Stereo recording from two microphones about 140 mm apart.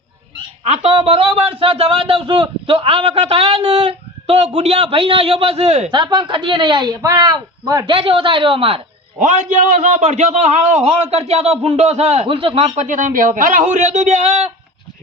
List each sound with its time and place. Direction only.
0.6 s a man's voice: 50° right (ahead or behind)
5.9 s speech: 35° right (ahead or behind)
7.9 s speech: 40° right (ahead or behind)
9.1 s a man's voice: 65° right (ahead or behind); by 12.7 s 40° right (ahead or behind)
12.7 s speech: 60° right (ahead or behind)